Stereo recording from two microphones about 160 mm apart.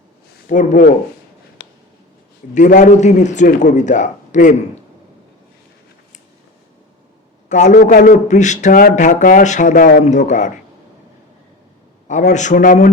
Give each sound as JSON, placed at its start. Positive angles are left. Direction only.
{"t": 0.4, "sound": "a man's voice", "side_deg": 50}
{"t": 2.5, "sound": "a man's voice", "side_deg": 50}
{"t": 7.5, "sound": "a man's voice", "side_deg": 50}
{"t": 7.8, "sound": "a man's voice", "side_deg": 65}
{"t": 12.3, "sound": "a man's voice", "side_deg": 50}